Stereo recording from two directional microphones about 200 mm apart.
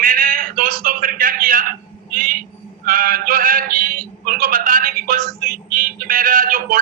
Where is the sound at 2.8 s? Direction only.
45° right (ahead or behind).